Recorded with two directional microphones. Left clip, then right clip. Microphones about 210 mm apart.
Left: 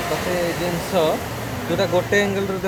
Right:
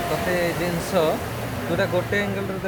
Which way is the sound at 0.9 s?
10° left (ahead or behind).